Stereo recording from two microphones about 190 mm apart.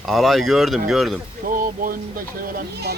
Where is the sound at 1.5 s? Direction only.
45° right (ahead or behind).